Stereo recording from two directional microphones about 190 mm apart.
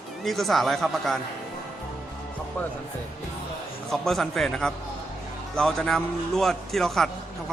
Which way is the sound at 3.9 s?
Centre (ahead or behind).